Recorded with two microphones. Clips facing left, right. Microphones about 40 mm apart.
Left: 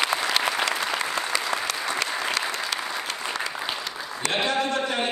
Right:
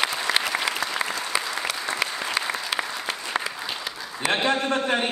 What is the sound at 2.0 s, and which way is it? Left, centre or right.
Applause, centre.